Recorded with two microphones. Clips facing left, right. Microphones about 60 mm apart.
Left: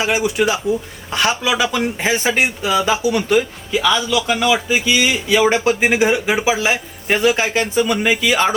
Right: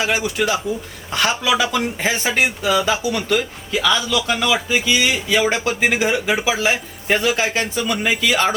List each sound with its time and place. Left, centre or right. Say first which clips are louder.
0.1 s speech: left 2 dB; centre
3.8 s a man's voice: left 2 dB; centre